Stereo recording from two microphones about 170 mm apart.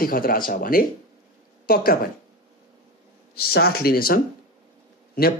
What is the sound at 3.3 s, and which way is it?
Speech, 65° left (ahead or behind).